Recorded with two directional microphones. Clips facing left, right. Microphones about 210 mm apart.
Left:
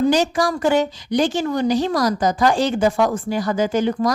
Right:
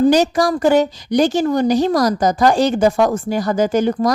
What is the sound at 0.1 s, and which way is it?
A woman's voice, 40° right (ahead or behind).